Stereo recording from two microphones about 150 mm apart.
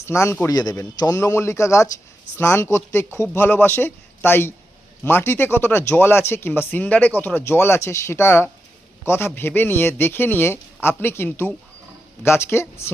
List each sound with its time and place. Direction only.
0.0 s a man's voice: 20° left (ahead or behind)